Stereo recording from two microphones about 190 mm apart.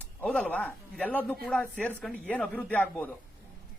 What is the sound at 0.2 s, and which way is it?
Speech, 5° left (ahead or behind).